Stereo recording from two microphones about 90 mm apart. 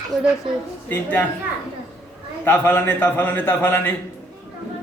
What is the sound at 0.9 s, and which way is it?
Speech, 20° left (ahead or behind).